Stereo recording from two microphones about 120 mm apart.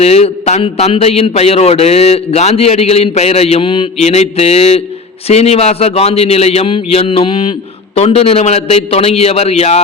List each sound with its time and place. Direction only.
0.0 s a man's voice: 60° left (ahead or behind)
4.1 s a man's voice: 65° left (ahead or behind); by 7.5 s 50° left (ahead or behind)
7.9 s a man's voice: 60° left (ahead or behind)